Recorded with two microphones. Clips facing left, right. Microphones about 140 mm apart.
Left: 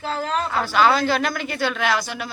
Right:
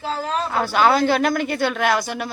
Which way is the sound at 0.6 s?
50° right (ahead or behind).